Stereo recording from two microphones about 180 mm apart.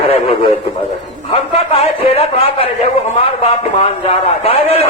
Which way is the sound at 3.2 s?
35° left (ahead or behind).